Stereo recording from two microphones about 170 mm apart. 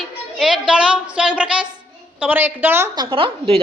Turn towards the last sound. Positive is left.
turn(degrees=-30)  # may be behind; listen again after turning